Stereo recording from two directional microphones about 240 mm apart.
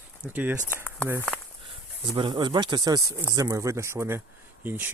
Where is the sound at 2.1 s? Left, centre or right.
Centre.